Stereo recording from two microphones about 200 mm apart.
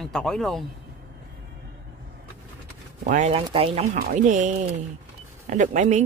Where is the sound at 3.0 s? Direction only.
35° right (ahead or behind).